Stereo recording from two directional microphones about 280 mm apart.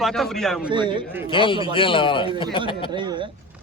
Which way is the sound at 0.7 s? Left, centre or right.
Centre.